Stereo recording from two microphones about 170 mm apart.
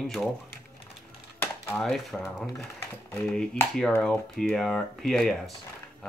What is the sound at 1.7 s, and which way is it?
Speech, centre (ahead or behind).